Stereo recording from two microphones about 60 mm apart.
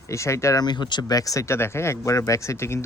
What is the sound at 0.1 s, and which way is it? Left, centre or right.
Speech, left.